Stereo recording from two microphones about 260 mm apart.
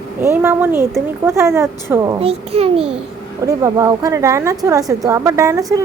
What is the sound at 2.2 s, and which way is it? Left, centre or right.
Speech, right.